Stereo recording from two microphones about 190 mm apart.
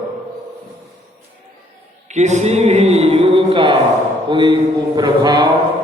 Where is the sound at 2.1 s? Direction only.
40° right (ahead or behind).